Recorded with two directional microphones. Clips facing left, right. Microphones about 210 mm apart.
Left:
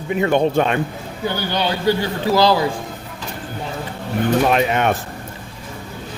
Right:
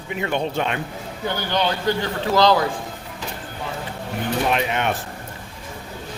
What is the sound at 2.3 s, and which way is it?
Speech, 10° left (ahead or behind).